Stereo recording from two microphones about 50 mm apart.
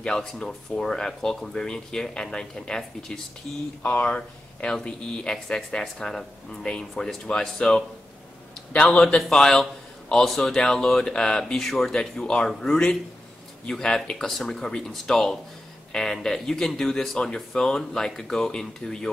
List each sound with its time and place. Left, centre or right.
0.1 s speech: centre
3.8 s speech: left; by 7.8 s centre
8.8 s speech: centre